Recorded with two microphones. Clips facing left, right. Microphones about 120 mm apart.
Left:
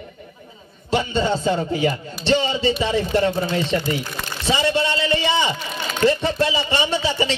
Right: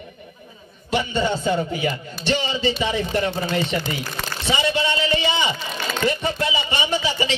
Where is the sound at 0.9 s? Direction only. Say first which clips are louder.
Left 2 dB; 35° left (ahead or behind).